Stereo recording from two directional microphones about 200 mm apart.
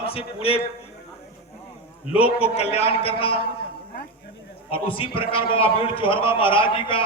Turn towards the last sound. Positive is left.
turn(degrees=25)  # may be behind; listen again after turning